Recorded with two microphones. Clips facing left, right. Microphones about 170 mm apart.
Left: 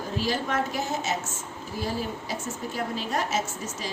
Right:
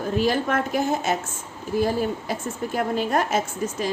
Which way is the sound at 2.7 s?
55° right (ahead or behind).